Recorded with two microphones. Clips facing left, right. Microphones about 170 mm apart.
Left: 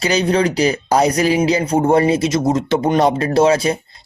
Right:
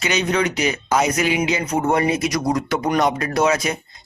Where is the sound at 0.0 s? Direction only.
35° left (ahead or behind).